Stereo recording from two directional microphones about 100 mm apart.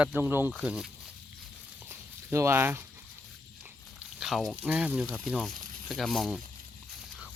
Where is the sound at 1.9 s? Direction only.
25° right (ahead or behind).